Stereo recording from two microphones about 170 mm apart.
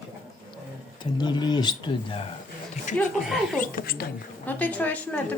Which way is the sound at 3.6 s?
60° left (ahead or behind).